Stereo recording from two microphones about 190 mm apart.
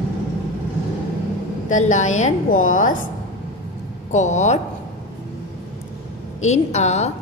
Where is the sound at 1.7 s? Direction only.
40° left (ahead or behind).